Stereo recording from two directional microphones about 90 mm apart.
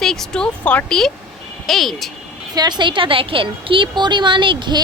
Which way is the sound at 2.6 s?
55° right (ahead or behind).